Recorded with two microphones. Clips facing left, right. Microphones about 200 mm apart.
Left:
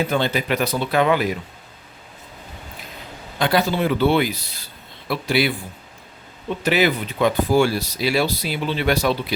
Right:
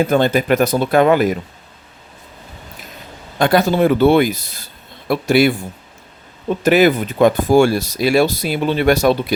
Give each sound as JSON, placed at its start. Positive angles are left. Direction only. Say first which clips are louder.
{"t": 0.0, "sound": "speech", "louder": "right 7 dB", "side_deg": -50}
{"t": 3.3, "sound": "speech", "louder": "right 6 dB", "side_deg": -50}
{"t": 6.6, "sound": "speech", "louder": "right 7 dB", "side_deg": -45}